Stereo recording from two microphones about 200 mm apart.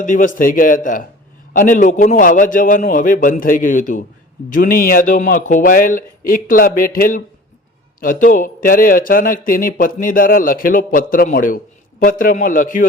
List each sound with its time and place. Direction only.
0.0 s a man's voice: 40° left (ahead or behind)